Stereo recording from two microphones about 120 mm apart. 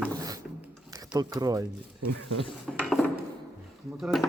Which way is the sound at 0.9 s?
30° right (ahead or behind).